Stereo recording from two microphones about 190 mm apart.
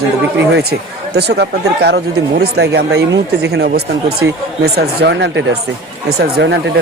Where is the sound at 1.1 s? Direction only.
60° right (ahead or behind).